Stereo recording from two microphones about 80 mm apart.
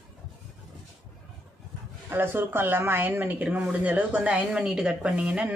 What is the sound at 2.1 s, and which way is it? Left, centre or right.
A woman's voice, right.